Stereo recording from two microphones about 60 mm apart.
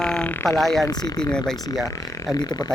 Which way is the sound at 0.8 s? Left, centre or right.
Left.